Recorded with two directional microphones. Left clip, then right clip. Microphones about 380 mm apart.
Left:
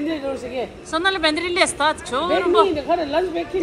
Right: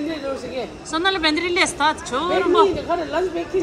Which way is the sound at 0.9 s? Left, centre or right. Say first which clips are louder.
Even; centre.